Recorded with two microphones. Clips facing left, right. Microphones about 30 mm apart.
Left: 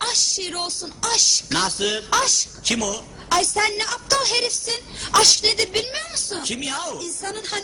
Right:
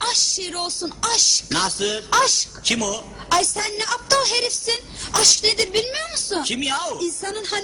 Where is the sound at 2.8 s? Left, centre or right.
Centre.